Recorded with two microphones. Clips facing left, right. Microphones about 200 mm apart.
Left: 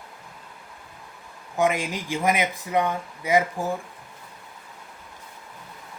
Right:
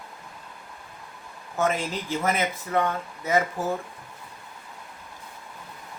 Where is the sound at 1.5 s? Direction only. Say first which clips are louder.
Left 2 dB; 15° left (ahead or behind).